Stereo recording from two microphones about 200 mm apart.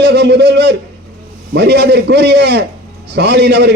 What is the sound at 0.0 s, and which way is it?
A man's voice, 55° right (ahead or behind).